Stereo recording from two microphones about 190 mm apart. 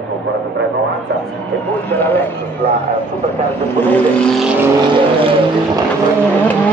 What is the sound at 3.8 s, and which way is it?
Vehicle, 5° left (ahead or behind).